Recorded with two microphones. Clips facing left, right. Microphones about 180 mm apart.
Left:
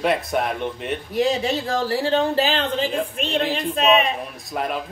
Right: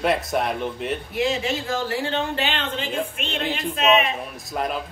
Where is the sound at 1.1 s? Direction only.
35° left (ahead or behind).